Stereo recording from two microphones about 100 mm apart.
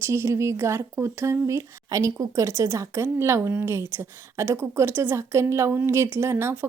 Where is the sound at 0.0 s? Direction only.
25° right (ahead or behind).